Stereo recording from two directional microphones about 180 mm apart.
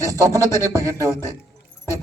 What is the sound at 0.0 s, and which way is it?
Speech, 20° right (ahead or behind).